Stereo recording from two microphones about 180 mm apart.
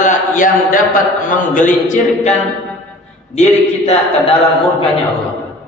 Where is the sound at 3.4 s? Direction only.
40° left (ahead or behind).